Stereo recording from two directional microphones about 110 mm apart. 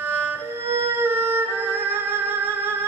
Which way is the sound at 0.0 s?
20° right (ahead or behind).